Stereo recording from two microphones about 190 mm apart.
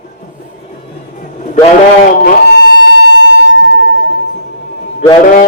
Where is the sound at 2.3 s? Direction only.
60° left (ahead or behind).